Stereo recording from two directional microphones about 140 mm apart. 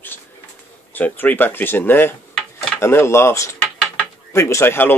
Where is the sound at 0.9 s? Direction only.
10° left (ahead or behind).